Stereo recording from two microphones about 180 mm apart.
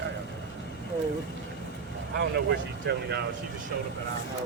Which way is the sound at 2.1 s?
75° right (ahead or behind).